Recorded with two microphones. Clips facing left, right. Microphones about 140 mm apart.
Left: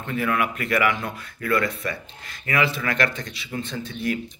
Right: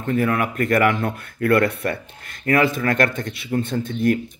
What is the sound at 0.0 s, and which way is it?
Speech, 40° right (ahead or behind).